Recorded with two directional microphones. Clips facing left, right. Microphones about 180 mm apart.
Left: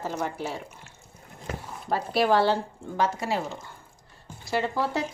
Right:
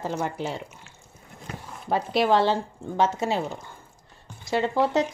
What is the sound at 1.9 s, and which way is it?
A woman's voice, 20° right (ahead or behind).